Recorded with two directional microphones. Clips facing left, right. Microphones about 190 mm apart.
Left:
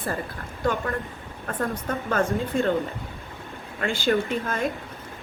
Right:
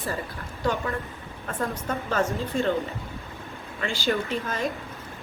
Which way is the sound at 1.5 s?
55° left (ahead or behind).